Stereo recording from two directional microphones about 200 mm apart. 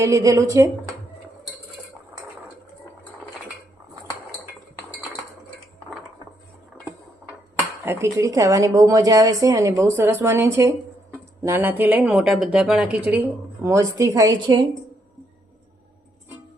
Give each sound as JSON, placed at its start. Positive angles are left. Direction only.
{"t": 0.0, "sound": "speech", "side_deg": -15}
{"t": 7.9, "sound": "speech", "side_deg": -10}